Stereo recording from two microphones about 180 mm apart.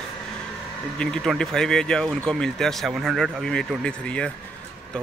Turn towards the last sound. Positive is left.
turn(degrees=5)  # may be behind; listen again after turning